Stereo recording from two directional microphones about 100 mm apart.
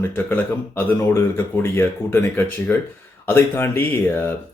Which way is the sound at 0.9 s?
30° left (ahead or behind).